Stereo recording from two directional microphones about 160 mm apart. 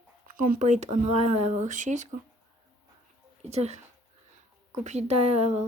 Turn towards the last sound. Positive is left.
turn(degrees=-40)  # may be behind; listen again after turning